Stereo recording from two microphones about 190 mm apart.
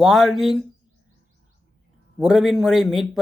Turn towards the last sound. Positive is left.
turn(degrees=0)  # may be behind; listen again after turning